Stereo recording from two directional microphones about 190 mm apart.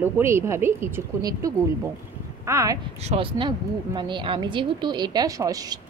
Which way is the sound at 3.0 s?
30° right (ahead or behind).